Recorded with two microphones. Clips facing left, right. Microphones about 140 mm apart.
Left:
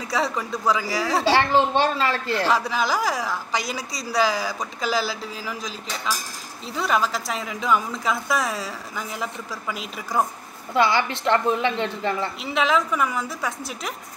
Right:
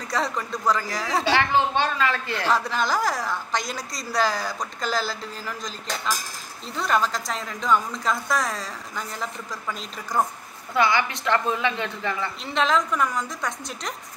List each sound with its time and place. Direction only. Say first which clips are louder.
0.1 s a woman's voice: left 2 dB; 5° left (ahead or behind)
1.3 s a child's voice: left 2 dB; 30° left (ahead or behind)
2.3 s a woman's voice: left 3 dB; 5° left (ahead or behind)
10.7 s a woman's voice: left 2 dB; 25° left (ahead or behind)
12.4 s a woman's voice: left 1 dB; 5° left (ahead or behind)